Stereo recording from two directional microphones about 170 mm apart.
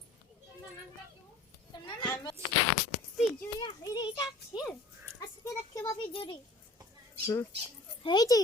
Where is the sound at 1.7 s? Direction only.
25° left (ahead or behind).